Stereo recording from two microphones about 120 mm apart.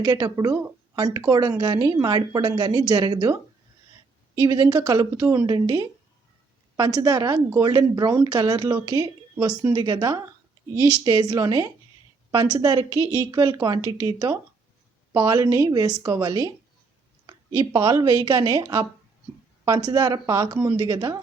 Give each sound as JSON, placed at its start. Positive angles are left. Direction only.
{"t": 0.0, "sound": "a woman's voice", "side_deg": -30}
{"t": 4.4, "sound": "a woman's voice", "side_deg": -35}